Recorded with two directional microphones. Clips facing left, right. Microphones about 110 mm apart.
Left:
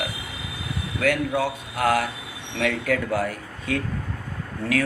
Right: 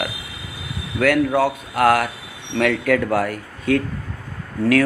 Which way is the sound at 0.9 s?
60° right (ahead or behind).